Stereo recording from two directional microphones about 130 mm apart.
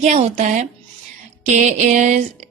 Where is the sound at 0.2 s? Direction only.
60° right (ahead or behind).